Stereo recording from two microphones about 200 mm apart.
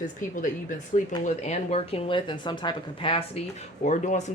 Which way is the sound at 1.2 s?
35° left (ahead or behind).